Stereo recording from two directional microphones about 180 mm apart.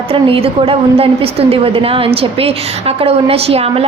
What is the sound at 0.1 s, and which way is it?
A woman's voice, 30° right (ahead or behind).